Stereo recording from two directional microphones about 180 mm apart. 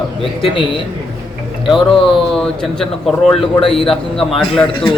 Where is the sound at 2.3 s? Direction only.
5° left (ahead or behind).